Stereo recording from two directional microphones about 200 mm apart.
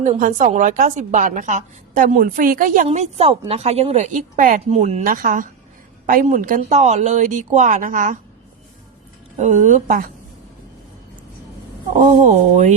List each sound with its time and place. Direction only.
0.0 s a woman's voice: 40° right (ahead or behind)
9.4 s a woman's voice: 35° right (ahead or behind)
11.9 s a woman's voice: 35° right (ahead or behind)